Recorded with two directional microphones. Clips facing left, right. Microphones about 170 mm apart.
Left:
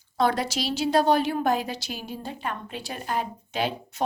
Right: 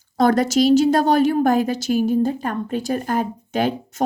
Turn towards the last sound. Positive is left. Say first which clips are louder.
# right 7 dB
turn(degrees=-45)  # may be behind; listen again after turning